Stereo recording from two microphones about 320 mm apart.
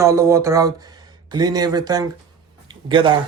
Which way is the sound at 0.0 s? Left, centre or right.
Centre.